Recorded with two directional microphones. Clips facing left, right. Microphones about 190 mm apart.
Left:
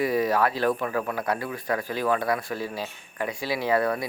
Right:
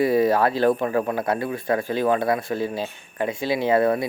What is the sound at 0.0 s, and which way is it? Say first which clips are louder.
Speech: right 5 dB; 30° right (ahead or behind).